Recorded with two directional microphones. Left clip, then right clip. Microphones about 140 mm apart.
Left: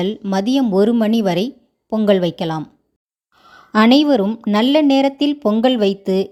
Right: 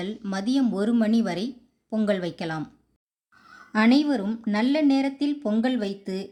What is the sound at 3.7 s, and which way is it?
Speech, 55° left (ahead or behind).